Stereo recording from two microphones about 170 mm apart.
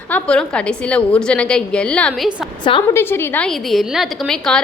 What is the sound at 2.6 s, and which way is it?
Speech, 30° left (ahead or behind).